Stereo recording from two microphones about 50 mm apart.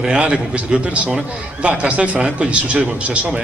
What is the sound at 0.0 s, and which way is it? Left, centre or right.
A man's voice, right.